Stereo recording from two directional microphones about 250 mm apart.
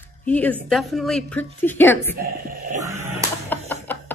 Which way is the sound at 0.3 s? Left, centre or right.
Centre.